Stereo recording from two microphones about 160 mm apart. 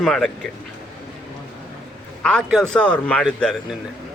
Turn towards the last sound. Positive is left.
turn(degrees=5)  # may be behind; listen again after turning